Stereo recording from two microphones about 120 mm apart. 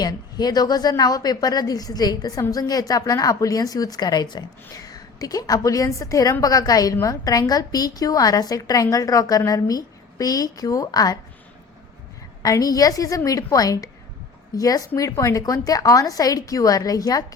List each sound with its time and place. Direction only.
0.0 s a woman's voice: 35° left (ahead or behind)
12.4 s a woman's voice: 30° left (ahead or behind)